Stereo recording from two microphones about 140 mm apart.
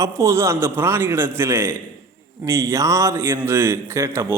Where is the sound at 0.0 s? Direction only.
20° right (ahead or behind).